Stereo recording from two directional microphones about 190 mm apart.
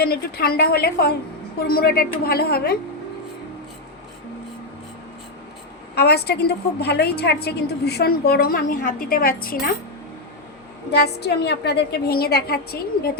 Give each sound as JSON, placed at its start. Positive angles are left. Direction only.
{"t": 0.0, "sound": "a woman's voice", "side_deg": 55}
{"t": 5.9, "sound": "a woman's voice", "side_deg": 60}
{"t": 10.9, "sound": "a woman's voice", "side_deg": 60}